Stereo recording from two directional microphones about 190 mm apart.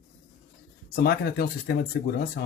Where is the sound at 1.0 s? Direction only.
55° left (ahead or behind).